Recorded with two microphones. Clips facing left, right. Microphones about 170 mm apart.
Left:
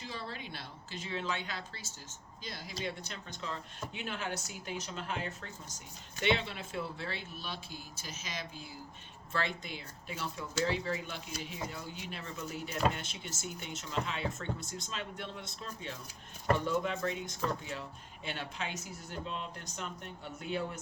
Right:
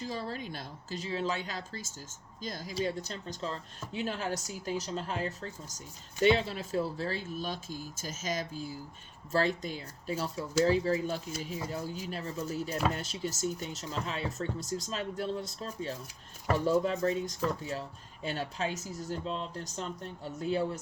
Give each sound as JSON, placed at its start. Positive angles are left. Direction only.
{"t": 0.0, "sound": "speech", "side_deg": -40}